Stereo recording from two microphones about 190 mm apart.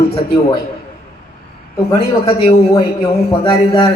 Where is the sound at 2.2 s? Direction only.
30° left (ahead or behind).